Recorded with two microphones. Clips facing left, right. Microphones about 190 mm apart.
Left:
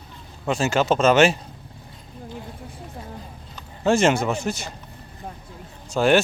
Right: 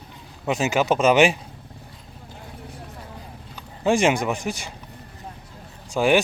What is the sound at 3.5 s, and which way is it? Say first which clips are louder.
A man's voice: left 1 dB; 15° right (ahead or behind).